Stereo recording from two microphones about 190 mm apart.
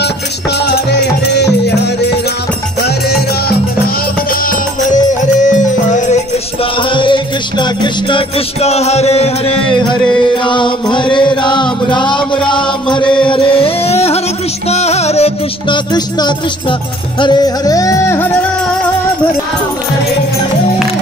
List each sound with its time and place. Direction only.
4.5 s music: 40° left (ahead or behind)
6.6 s music: 25° left (ahead or behind)
9.7 s chant: 25° left (ahead or behind)
14.7 s music: 35° left (ahead or behind); by 18.3 s 15° left (ahead or behind)